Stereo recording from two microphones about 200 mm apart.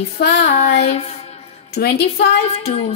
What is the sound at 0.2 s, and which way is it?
Speech, 55° left (ahead or behind).